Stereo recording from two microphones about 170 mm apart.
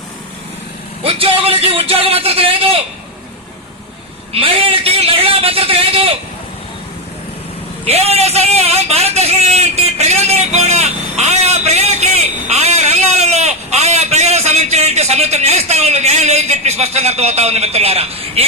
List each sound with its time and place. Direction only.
1.0 s speech: 35° right (ahead or behind)
4.3 s a man's voice: 30° right (ahead or behind)
7.9 s a man's voice: 35° right (ahead or behind)